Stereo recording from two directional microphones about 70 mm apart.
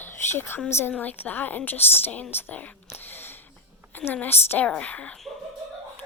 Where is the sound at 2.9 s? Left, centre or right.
Left.